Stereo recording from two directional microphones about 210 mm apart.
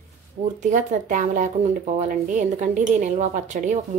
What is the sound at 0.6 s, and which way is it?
Speech, 35° right (ahead or behind).